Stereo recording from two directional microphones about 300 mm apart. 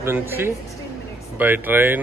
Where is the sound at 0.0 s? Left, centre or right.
Centre.